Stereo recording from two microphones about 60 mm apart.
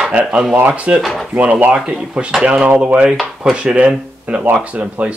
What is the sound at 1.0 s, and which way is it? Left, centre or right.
Speech, centre.